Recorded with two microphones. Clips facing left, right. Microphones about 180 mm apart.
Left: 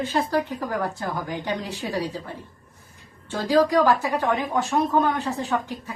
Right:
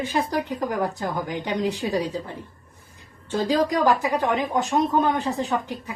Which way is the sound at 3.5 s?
20° right (ahead or behind).